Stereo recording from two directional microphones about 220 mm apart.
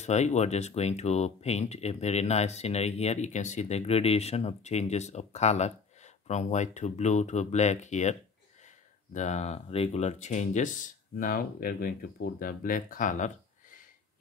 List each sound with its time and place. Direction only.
0.0 s speech: 30° left (ahead or behind)